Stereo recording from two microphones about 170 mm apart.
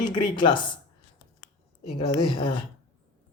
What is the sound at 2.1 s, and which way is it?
Speech, 30° left (ahead or behind).